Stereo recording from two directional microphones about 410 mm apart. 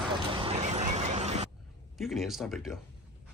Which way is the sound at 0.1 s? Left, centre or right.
Centre.